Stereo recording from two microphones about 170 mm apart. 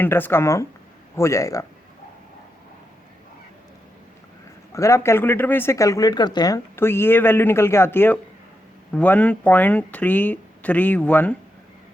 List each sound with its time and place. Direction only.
0.0 s speech: 10° left (ahead or behind)
4.7 s speech: 15° left (ahead or behind)